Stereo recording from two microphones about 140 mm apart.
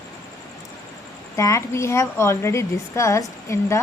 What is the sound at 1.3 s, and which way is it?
A woman's voice, 20° left (ahead or behind).